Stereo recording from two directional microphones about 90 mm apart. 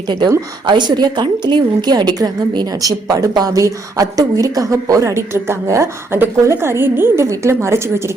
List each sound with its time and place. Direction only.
0.7 s a woman's voice: 55° right (ahead or behind); by 8.1 s 30° right (ahead or behind)